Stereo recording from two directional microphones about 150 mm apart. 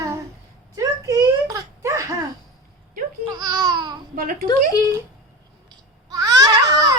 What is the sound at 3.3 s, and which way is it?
Babbling, 25° right (ahead or behind).